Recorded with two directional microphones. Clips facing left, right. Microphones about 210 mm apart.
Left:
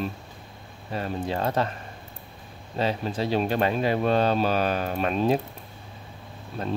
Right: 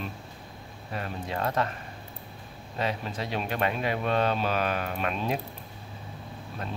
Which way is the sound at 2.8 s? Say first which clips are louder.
Left 5 dB; 30° left (ahead or behind).